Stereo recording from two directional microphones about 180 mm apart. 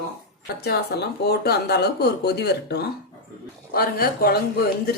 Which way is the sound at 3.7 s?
55° left (ahead or behind).